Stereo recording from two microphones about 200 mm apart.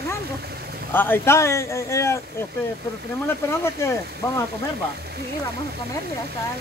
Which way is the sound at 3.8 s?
15° left (ahead or behind).